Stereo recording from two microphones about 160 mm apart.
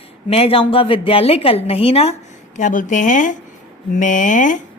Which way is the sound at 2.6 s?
50° left (ahead or behind).